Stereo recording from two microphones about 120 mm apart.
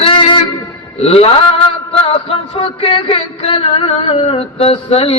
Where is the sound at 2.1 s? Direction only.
55° left (ahead or behind).